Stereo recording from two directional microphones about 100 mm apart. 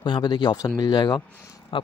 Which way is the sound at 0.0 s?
45° left (ahead or behind).